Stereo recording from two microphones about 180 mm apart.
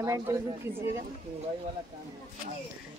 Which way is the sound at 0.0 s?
15° right (ahead or behind).